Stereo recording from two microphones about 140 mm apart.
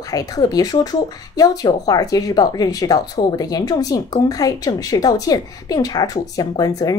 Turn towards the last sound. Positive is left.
turn(degrees=25)  # may be behind; listen again after turning